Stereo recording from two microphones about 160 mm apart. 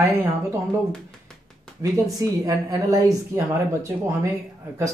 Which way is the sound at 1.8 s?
20° right (ahead or behind).